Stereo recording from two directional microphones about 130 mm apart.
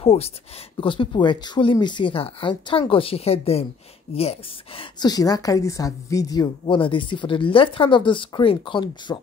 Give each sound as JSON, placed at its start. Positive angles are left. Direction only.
{"t": 0.0, "sound": "speech", "side_deg": 50}
{"t": 5.0, "sound": "a woman's voice", "side_deg": 30}
{"t": 6.6, "sound": "speech", "side_deg": 40}